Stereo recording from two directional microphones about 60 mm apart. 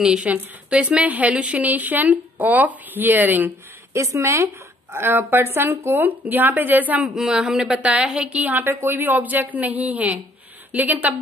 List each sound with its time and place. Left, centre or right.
0.0 s speech: centre
3.9 s speech: right
4.9 s speech: right
7.2 s speech: centre; by 11.1 s right